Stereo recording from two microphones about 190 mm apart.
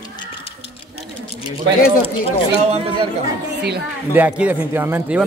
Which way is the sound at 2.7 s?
30° right (ahead or behind).